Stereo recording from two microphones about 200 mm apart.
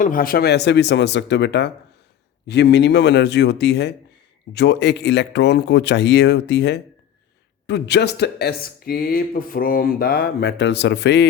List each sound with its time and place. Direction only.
0.0 s speech: 45° left (ahead or behind)